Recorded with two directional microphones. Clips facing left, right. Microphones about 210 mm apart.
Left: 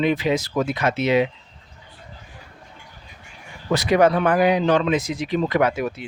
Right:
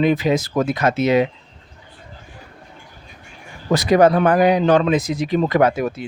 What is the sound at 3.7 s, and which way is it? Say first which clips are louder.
Speech: right 3 dB; 40° right (ahead or behind).